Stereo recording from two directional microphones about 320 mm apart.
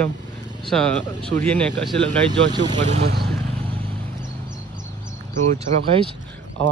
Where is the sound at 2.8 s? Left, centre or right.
Right.